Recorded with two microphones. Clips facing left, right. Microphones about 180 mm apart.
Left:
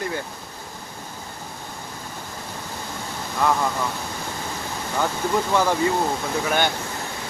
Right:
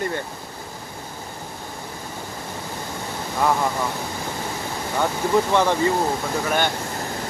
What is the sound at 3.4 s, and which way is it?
Speech, 10° right (ahead or behind).